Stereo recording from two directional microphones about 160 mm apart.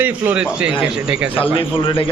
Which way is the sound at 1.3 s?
35° left (ahead or behind).